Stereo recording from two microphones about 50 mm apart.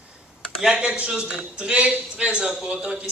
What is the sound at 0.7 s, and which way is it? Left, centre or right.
A man's voice, right.